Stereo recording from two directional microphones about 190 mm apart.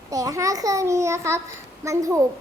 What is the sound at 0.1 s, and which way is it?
A child's voice, 20° right (ahead or behind).